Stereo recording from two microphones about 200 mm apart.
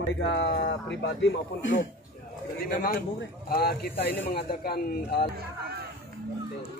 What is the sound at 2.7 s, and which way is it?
A man's voice, 45° left (ahead or behind).